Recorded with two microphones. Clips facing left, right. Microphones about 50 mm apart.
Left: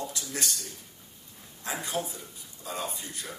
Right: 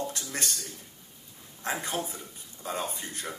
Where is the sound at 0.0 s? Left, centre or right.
Right.